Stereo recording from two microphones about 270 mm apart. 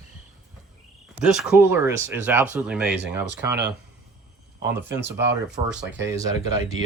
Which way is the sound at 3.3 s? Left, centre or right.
Right.